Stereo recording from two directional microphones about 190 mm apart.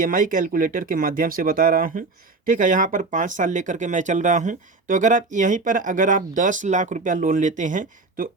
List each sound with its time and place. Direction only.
0.0 s speech: 45° right (ahead or behind)